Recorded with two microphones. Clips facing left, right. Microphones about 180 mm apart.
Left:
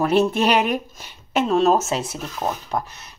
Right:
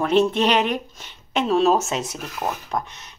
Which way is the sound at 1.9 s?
30° left (ahead or behind).